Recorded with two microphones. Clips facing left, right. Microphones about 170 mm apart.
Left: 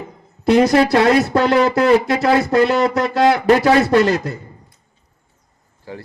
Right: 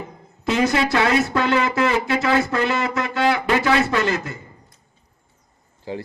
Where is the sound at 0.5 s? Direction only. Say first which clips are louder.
Left 7 dB; 35° left (ahead or behind).